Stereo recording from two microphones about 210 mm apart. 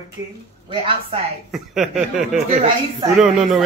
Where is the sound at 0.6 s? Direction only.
25° right (ahead or behind).